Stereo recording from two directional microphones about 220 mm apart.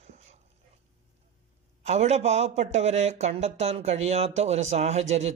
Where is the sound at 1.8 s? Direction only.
30° right (ahead or behind).